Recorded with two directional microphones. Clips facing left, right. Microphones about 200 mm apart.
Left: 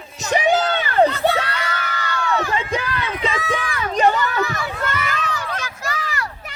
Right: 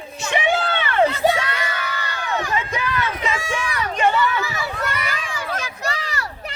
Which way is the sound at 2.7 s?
30° left (ahead or behind).